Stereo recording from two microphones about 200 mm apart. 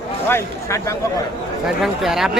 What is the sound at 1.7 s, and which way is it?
Speech, centre (ahead or behind).